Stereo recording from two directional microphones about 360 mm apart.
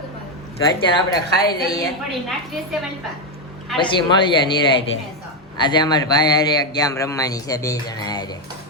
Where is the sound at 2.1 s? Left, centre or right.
Centre.